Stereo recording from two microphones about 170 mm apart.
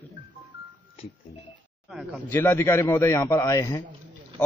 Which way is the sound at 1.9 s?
Centre (ahead or behind).